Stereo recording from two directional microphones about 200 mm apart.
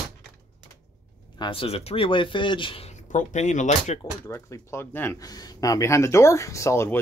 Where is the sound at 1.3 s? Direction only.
25° left (ahead or behind).